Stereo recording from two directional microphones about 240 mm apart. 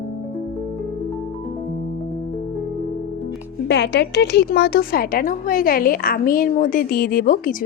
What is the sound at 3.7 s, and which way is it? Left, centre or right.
A woman's voice, left.